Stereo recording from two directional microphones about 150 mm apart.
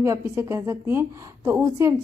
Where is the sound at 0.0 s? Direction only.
20° right (ahead or behind).